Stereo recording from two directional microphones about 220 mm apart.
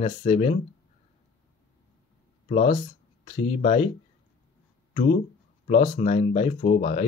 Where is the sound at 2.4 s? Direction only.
30° left (ahead or behind).